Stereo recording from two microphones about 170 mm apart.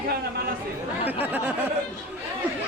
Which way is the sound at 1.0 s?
10° right (ahead or behind).